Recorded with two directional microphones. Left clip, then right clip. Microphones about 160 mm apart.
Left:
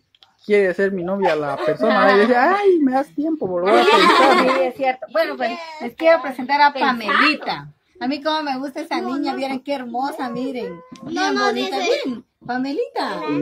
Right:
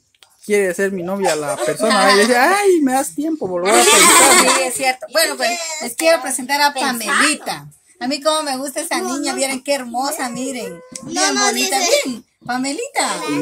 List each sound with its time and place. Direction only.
0.5 s a woman's voice: 20° right (ahead or behind)
3.6 s speech: 90° right
4.6 s a sound: centre (ahead or behind)
5.5 s speech: 55° right (ahead or behind)
5.9 s a woman's voice: 15° right (ahead or behind)
6.8 s a woman's voice: 45° right (ahead or behind); by 10.7 s 85° right
11.1 s speech: 60° right (ahead or behind); by 13.2 s 90° right